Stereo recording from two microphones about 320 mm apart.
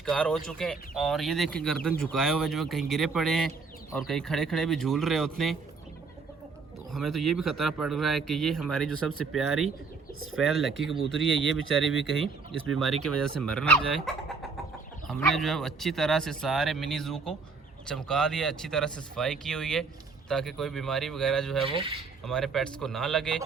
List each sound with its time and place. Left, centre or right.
0.0 s speech: centre
6.9 s speech: centre
21.7 s coin: centre
22.2 s speech: centre